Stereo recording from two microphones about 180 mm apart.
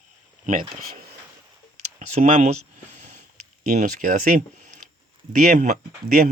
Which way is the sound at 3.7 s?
45° right (ahead or behind).